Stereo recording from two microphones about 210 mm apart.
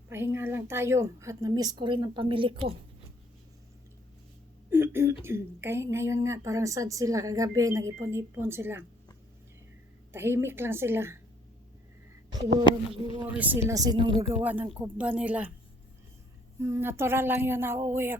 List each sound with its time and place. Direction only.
0.1 s a woman's voice: 10° right (ahead or behind)
4.7 s a sound: 10° right (ahead or behind)
5.2 s a woman's voice: 10° right (ahead or behind)
10.1 s a woman's voice: 10° right (ahead or behind)
12.7 s speech: 20° left (ahead or behind)
13.2 s a woman's voice: 10° right (ahead or behind)
14.4 s a woman's voice: 10° right (ahead or behind)
16.6 s a woman's voice: 15° right (ahead or behind)